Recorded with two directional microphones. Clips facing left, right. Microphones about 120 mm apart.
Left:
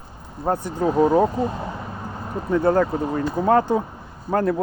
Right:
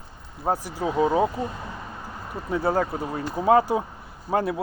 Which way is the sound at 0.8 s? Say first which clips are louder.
Left 4 dB; 40° left (ahead or behind).